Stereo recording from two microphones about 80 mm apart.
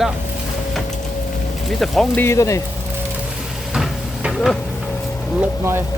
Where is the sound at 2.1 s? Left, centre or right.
Left.